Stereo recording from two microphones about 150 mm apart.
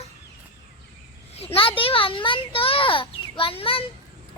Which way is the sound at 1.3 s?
40° left (ahead or behind).